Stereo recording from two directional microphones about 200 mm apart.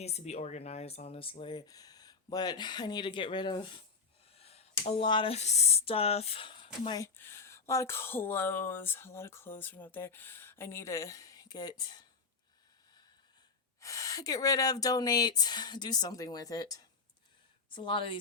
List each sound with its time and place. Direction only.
0.0 s speech: 30° left (ahead or behind)
4.4 s a sound: 30° left (ahead or behind)
4.9 s speech: 25° left (ahead or behind)
13.8 s speech: 15° left (ahead or behind)